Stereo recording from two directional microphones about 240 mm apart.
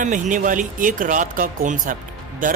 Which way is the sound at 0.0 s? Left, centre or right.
Right.